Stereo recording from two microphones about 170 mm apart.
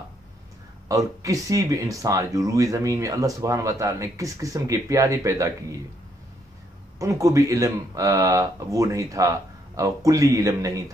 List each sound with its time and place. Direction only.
0.8 s speech: 20° right (ahead or behind)
7.0 s speech: 20° right (ahead or behind)